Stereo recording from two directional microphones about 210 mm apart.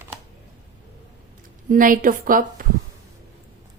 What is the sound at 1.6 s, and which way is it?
A woman's voice, 40° right (ahead or behind).